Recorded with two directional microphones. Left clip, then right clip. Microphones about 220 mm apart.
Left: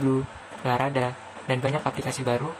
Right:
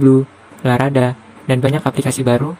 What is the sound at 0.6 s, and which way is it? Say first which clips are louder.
Speech: right 9 dB; 30° right (ahead or behind).